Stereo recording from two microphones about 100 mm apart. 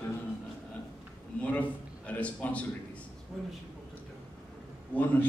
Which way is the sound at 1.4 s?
15° left (ahead or behind).